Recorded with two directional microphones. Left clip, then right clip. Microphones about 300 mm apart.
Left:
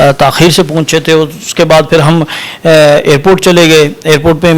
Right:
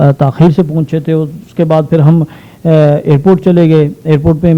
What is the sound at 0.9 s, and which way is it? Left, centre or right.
Speech, centre.